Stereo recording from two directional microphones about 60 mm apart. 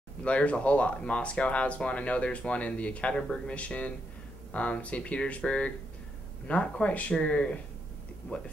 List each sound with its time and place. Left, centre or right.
0.2 s speech: centre